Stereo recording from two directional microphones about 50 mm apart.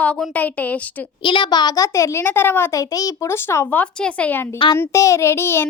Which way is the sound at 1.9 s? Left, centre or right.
Left.